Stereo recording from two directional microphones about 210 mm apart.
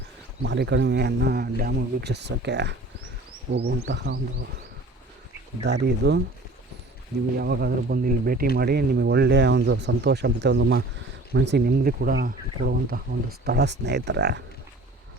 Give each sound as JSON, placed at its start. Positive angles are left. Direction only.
{"t": 0.4, "sound": "a man's voice", "side_deg": -55}
{"t": 5.6, "sound": "a man's voice", "side_deg": -55}